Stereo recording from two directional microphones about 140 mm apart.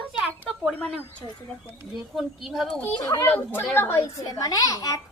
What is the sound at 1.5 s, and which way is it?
A woman's voice, centre (ahead or behind).